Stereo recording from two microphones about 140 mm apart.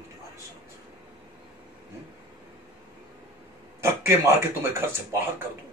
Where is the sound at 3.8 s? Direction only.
20° right (ahead or behind).